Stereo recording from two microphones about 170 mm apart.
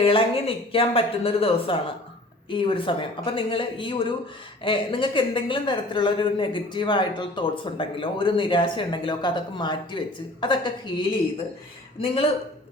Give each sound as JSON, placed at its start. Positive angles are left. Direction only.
{"t": 0.0, "sound": "a man's voice", "side_deg": 30}